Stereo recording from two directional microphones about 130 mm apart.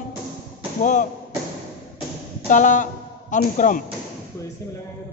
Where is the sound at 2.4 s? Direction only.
75° left (ahead or behind).